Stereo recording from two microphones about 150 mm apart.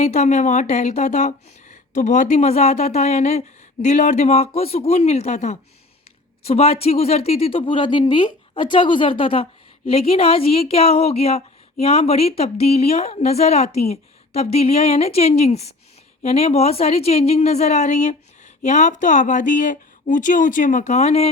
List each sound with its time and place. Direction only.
0.0 s speech: 50° left (ahead or behind)